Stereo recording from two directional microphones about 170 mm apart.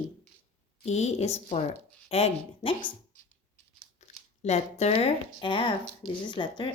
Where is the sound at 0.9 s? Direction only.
40° left (ahead or behind).